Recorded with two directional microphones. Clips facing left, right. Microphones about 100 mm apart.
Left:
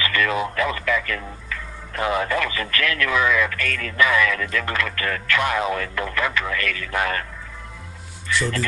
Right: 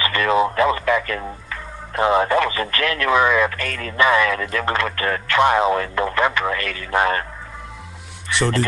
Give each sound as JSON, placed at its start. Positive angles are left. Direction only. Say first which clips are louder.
{"t": 0.0, "sound": "speech", "louder": "right 5 dB", "side_deg": -30}